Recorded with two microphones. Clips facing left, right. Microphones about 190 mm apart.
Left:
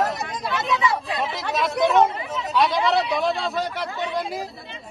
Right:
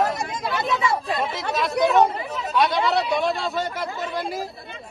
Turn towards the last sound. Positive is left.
turn(degrees=0)  # may be behind; listen again after turning